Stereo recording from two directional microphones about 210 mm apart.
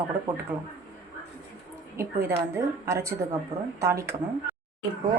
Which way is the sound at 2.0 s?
10° right (ahead or behind).